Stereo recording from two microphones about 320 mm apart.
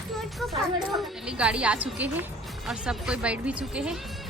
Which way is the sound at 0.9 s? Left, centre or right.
Centre.